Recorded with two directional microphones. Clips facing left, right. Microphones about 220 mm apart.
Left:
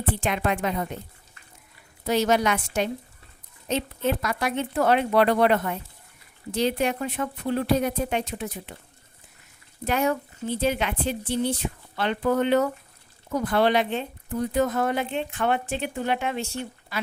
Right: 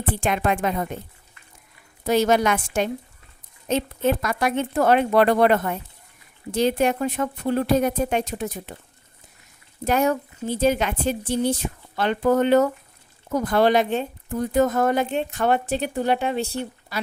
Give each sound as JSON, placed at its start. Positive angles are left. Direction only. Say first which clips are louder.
{"t": 0.2, "sound": "speech", "louder": "right 5 dB", "side_deg": -50}
{"t": 2.0, "sound": "speech", "louder": "right 3 dB", "side_deg": -50}
{"t": 9.8, "sound": "speech", "louder": "right 3 dB", "side_deg": -45}